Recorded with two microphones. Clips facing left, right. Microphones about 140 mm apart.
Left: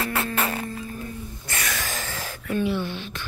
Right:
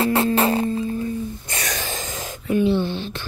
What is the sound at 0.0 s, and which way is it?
Music, 25° right (ahead or behind).